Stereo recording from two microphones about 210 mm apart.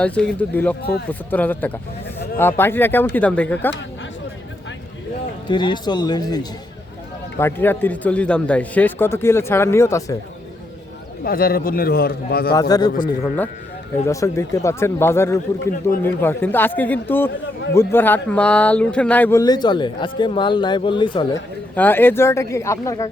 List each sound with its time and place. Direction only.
0.0 s speech: 5° left (ahead or behind)
0.8 s a man's voice: 50° left (ahead or behind)
1.3 s speech: 10° left (ahead or behind)
5.5 s speech: 20° left (ahead or behind)
11.2 s a man's voice: 45° left (ahead or behind)
12.5 s speech: 20° left (ahead or behind)
15.6 s a man's voice: 40° left (ahead or behind)
16.0 s speech: 10° left (ahead or behind)
21.8 s speech: 10° left (ahead or behind)